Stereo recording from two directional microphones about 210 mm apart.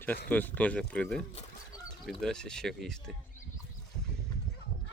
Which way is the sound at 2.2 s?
5° left (ahead or behind).